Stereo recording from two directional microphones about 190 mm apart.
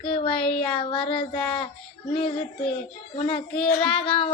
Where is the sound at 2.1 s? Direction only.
25° left (ahead or behind).